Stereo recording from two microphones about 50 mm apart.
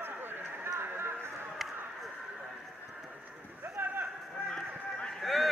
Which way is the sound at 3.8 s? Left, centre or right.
Right.